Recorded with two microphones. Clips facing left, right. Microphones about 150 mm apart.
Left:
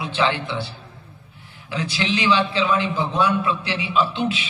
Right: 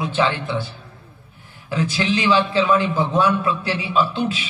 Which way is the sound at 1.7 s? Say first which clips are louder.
Right 3 dB; 45° right (ahead or behind).